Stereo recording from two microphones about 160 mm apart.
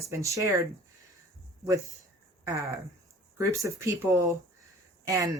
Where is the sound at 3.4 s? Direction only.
20° right (ahead or behind).